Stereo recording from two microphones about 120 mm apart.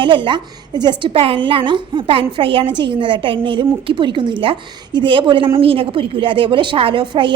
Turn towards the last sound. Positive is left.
turn(degrees=-45)  # may be behind; listen again after turning